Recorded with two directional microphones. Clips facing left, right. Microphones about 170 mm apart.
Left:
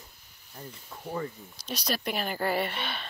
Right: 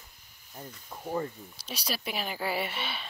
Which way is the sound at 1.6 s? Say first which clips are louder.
Left 4 dB; 10° right (ahead or behind).